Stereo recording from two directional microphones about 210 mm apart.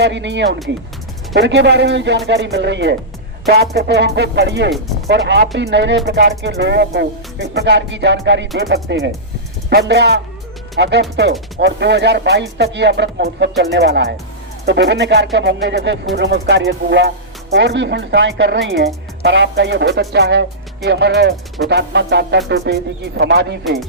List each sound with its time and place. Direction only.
0.0 s music: 55° right (ahead or behind)
3.5 s speech: 50° right (ahead or behind)
5.5 s music: 55° right (ahead or behind)
9.6 s speech: 50° right (ahead or behind)
10.8 s music: 55° right (ahead or behind)
13.7 s speech: 55° right (ahead or behind)
14.6 s music: 55° right (ahead or behind)
20.8 s speech: 50° right (ahead or behind)